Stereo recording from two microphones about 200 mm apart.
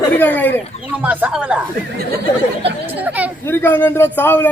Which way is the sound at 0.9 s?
10° right (ahead or behind).